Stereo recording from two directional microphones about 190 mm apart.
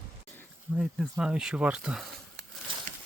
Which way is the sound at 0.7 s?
Centre (ahead or behind).